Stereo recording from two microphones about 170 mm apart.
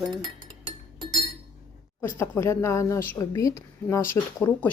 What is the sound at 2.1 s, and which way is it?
A woman's voice, 15° left (ahead or behind).